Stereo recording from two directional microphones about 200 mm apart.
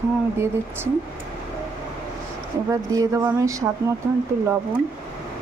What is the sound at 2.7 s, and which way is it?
Speech, 15° right (ahead or behind).